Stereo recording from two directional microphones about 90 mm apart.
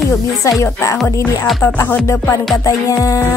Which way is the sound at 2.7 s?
40° left (ahead or behind).